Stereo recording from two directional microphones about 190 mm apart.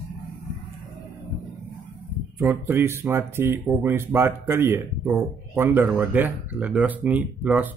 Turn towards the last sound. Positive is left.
turn(degrees=-10)  # may be behind; listen again after turning